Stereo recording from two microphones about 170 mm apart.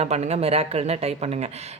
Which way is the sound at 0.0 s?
40° right (ahead or behind).